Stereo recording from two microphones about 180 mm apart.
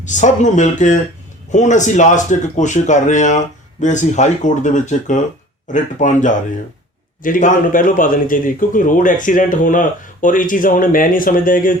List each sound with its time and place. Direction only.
0.0 s speech: 45° left (ahead or behind)